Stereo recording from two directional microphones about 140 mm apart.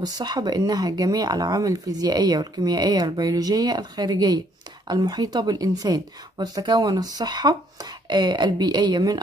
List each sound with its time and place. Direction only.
0.0 s speech: 30° right (ahead or behind)